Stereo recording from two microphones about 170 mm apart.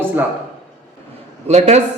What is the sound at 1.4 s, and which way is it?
Speech, 40° right (ahead or behind).